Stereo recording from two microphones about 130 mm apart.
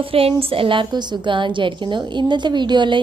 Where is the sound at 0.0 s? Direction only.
45° right (ahead or behind).